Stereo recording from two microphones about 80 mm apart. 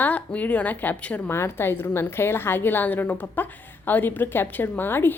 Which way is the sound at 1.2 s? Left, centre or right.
Left.